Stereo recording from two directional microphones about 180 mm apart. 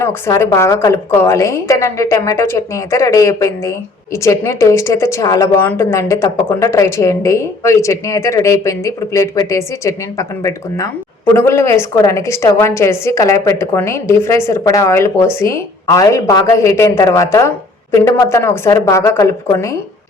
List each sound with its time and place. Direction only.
0.0 s a woman's voice: 15° left (ahead or behind)